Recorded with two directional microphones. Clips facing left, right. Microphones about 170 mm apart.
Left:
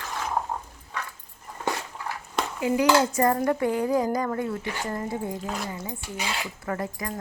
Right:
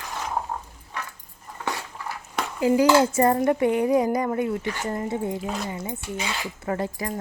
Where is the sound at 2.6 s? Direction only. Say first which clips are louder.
Right 4 dB; 30° right (ahead or behind).